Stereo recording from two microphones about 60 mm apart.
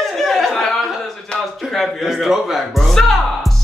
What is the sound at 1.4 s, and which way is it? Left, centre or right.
Music, centre.